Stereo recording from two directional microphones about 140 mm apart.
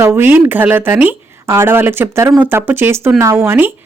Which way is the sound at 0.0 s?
15° right (ahead or behind).